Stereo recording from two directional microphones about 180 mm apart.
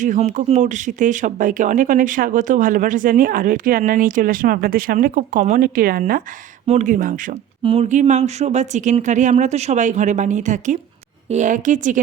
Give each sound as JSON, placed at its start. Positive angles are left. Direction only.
{"t": 0.0, "sound": "speech", "side_deg": -45}
{"t": 7.6, "sound": "speech", "side_deg": -35}